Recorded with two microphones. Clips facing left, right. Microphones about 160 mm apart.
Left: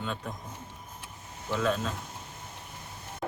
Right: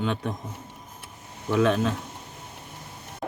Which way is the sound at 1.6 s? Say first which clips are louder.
Right 7 dB; 75° right (ahead or behind).